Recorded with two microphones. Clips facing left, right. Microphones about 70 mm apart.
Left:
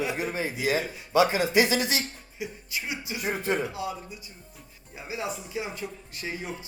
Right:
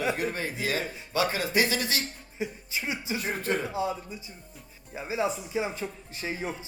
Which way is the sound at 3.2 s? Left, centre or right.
Centre.